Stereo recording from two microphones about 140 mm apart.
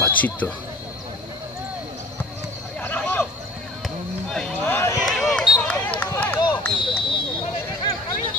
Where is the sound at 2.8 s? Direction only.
15° left (ahead or behind).